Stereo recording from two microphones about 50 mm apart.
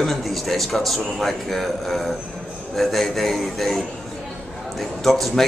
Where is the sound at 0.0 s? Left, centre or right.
Centre.